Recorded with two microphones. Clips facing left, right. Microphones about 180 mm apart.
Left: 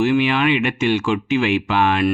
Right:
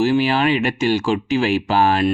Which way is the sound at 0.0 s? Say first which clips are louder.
Even; 35° right (ahead or behind).